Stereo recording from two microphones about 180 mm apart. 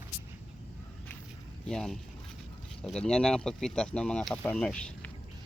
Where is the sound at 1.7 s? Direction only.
Centre (ahead or behind).